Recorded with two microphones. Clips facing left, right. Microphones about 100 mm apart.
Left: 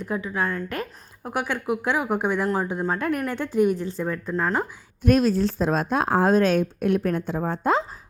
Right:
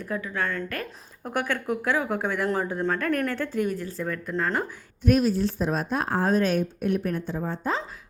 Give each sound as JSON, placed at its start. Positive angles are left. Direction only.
{"t": 0.0, "sound": "a woman's voice", "side_deg": 20}
{"t": 5.0, "sound": "a woman's voice", "side_deg": 85}